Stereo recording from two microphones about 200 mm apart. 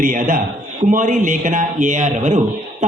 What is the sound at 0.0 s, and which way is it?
A man's voice, 40° right (ahead or behind).